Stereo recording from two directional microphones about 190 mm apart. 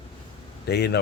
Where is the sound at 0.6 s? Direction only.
60° left (ahead or behind).